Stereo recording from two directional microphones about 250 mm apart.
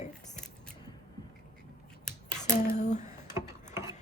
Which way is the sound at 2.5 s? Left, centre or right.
Left.